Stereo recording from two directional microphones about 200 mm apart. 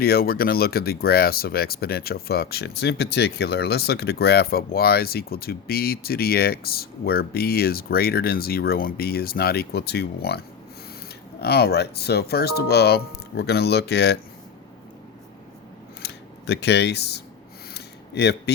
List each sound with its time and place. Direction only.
0.0 s speech: 50° left (ahead or behind)
16.0 s speech: 55° left (ahead or behind)
17.7 s a sound: 55° left (ahead or behind)